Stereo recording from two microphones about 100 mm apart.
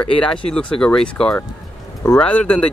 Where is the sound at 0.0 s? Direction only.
10° left (ahead or behind).